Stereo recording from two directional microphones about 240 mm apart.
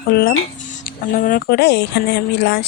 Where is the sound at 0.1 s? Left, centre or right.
Left.